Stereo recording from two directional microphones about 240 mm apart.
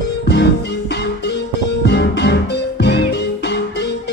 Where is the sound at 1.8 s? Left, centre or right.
Left.